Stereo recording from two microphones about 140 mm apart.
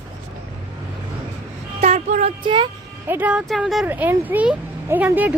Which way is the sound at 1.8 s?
50° right (ahead or behind).